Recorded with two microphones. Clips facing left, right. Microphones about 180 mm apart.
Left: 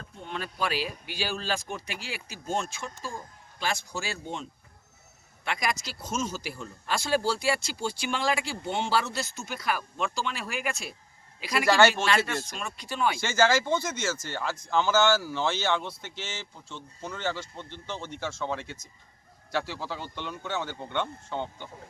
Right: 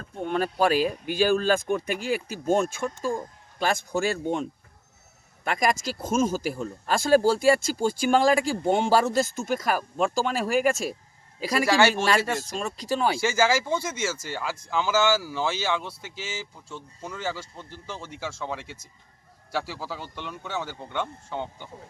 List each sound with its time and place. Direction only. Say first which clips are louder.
0.2 s speech: right 9 dB; 50° right (ahead or behind)
5.5 s speech: right 6 dB; 45° right (ahead or behind)
11.7 s speech: left 1 dB; 10° right (ahead or behind)
12.0 s speech: right 3 dB; 40° right (ahead or behind)
13.1 s speech: right 1 dB; 10° right (ahead or behind)